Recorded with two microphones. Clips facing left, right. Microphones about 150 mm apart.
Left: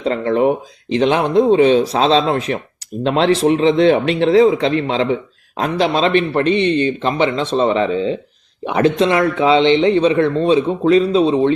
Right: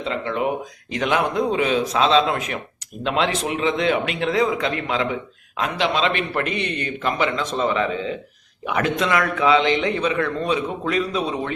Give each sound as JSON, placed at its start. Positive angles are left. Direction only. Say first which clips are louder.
{"t": 0.0, "sound": "speech", "louder": "left 8 dB", "side_deg": 40}